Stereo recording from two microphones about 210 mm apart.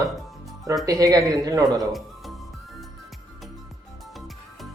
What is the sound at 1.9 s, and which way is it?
Music, centre (ahead or behind).